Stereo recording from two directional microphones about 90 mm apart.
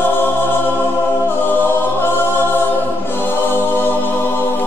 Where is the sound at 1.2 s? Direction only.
25° left (ahead or behind).